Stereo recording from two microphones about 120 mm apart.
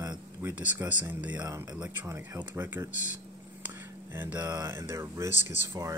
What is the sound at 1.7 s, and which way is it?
Speech, 10° right (ahead or behind).